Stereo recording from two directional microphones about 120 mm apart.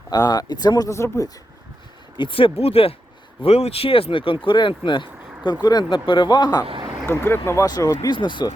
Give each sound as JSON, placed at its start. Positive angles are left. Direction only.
{"t": 0.1, "sound": "speech", "side_deg": 35}
{"t": 2.1, "sound": "speech", "side_deg": 45}
{"t": 6.7, "sound": "a sound", "side_deg": -40}
{"t": 7.0, "sound": "speech", "side_deg": 20}
{"t": 7.9, "sound": "speech", "side_deg": 40}